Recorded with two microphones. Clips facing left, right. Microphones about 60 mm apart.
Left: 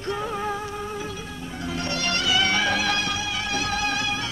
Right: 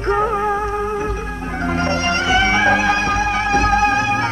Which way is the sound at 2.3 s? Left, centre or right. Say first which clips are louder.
Right 8 dB; right.